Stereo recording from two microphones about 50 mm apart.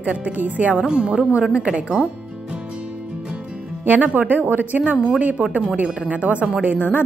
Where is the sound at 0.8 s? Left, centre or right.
Centre.